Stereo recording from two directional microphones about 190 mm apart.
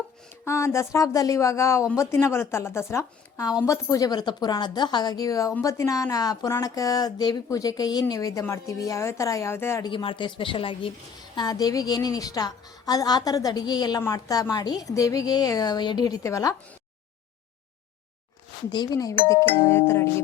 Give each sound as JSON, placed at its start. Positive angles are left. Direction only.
{"t": 0.4, "sound": "speech", "side_deg": 15}
{"t": 9.9, "sound": "a woman's voice", "side_deg": 25}
{"t": 18.7, "sound": "speech", "side_deg": 20}